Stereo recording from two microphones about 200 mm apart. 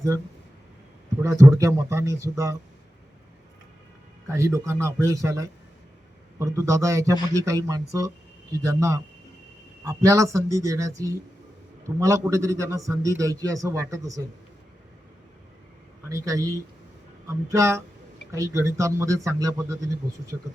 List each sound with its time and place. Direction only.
1.2 s a man's voice: 15° right (ahead or behind)
4.3 s a man's voice: 15° right (ahead or behind)
16.0 s a man's voice: 15° right (ahead or behind)